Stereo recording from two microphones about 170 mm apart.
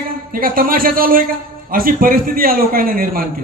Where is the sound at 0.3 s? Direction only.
55° right (ahead or behind).